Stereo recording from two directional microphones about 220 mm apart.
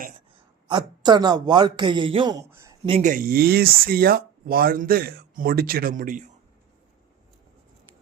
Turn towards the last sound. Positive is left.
turn(degrees=-40)  # may be behind; listen again after turning